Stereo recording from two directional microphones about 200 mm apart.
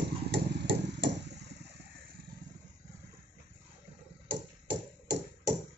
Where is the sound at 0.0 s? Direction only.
55° right (ahead or behind).